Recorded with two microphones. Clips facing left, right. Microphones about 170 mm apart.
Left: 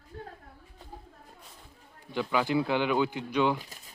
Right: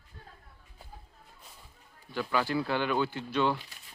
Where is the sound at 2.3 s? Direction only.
15° left (ahead or behind).